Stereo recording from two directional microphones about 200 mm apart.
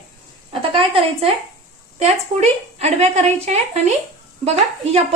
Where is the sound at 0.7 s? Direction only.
25° right (ahead or behind).